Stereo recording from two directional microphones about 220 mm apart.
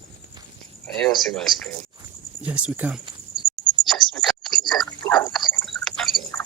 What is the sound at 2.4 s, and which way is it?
Speech, 5° right (ahead or behind).